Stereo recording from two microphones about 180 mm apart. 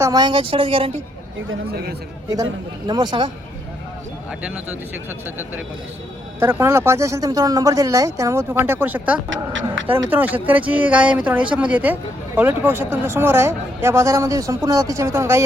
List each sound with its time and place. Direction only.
0.0 s a man's voice: 20° right (ahead or behind)
2.3 s a man's voice: 20° right (ahead or behind)
4.4 s speech: 5° right (ahead or behind)
6.4 s speech: 15° right (ahead or behind)
9.3 s speech: 90° right
9.8 s speech: 10° right (ahead or behind)